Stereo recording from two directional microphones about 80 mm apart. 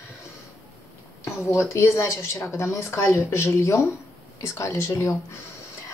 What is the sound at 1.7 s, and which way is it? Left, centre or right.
Speech, left.